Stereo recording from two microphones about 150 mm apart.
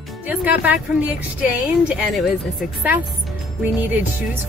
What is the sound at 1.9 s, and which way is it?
Speech, 5° right (ahead or behind).